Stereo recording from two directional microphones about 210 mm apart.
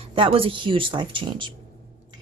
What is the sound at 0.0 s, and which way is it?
A woman's voice, 25° right (ahead or behind).